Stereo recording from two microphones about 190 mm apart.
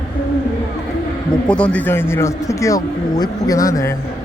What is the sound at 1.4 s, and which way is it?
A man's voice, 5° left (ahead or behind).